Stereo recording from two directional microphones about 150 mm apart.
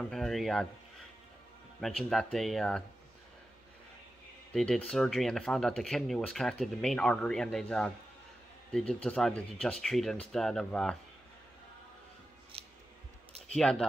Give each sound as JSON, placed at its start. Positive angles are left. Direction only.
{"t": 0.1, "sound": "speech", "side_deg": 0}
{"t": 1.8, "sound": "speech", "side_deg": 0}
{"t": 4.5, "sound": "speech", "side_deg": 5}
{"t": 12.5, "sound": "scissors", "side_deg": -40}
{"t": 13.5, "sound": "speech", "side_deg": 5}